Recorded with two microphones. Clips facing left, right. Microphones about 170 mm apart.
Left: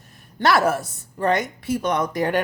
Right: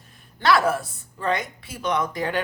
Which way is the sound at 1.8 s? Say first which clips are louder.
Even; 45° left (ahead or behind).